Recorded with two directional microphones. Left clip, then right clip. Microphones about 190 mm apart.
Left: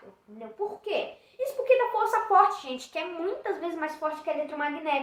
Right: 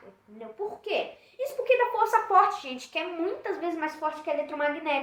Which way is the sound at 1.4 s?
15° right (ahead or behind).